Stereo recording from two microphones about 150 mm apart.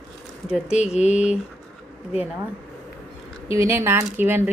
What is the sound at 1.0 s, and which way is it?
Speech, 50° left (ahead or behind).